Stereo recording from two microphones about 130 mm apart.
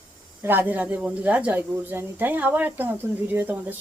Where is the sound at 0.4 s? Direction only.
15° right (ahead or behind).